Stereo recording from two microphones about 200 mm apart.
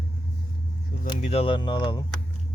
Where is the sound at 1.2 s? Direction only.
30° left (ahead or behind).